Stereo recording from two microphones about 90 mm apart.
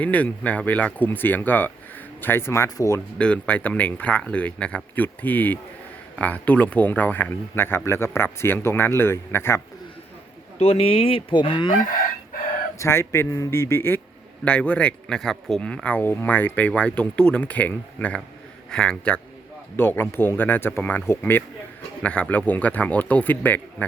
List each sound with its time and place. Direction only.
0.0 s speech: 15° left (ahead or behind)
2.6 s speech: 40° left (ahead or behind)
3.2 s speech: 15° left (ahead or behind)
10.7 s fowl: 90° left; by 11.8 s 65° left (ahead or behind)
12.8 s speech: 30° left (ahead or behind)
14.4 s speech: 15° left (ahead or behind)
15.7 s speech: 15° left (ahead or behind)
19.7 s speech: 25° left (ahead or behind)